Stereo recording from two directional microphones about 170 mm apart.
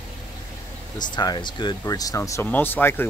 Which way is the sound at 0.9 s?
25° left (ahead or behind).